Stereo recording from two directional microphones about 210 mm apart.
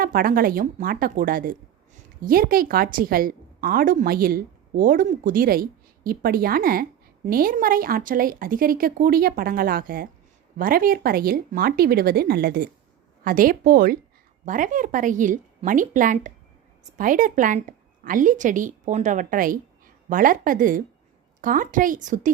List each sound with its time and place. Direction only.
0.0 s a woman's voice: 45° right (ahead or behind)